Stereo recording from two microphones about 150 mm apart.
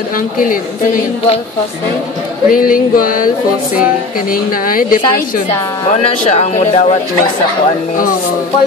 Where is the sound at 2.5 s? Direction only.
65° left (ahead or behind).